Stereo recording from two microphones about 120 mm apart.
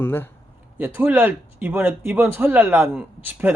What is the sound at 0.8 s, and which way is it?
Speech, 15° right (ahead or behind).